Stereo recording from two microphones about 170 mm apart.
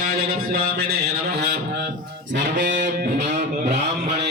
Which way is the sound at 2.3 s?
90° right.